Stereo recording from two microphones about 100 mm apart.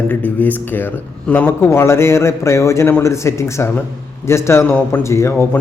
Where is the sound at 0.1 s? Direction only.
15° left (ahead or behind).